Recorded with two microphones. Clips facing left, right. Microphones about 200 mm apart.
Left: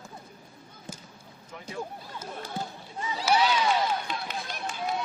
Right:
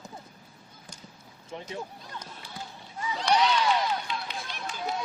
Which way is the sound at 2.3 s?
50° left (ahead or behind).